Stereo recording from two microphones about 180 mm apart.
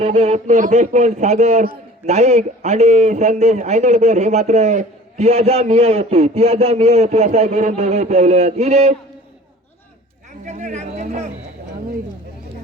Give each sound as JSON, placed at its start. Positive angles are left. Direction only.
{"t": 0.0, "sound": "a man's voice", "side_deg": -40}
{"t": 10.4, "sound": "a man's voice", "side_deg": -40}